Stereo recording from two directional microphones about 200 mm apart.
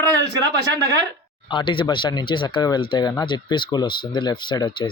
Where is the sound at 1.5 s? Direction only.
25° left (ahead or behind).